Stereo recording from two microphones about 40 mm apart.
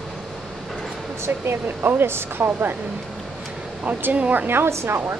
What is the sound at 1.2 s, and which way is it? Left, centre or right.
Speech, right.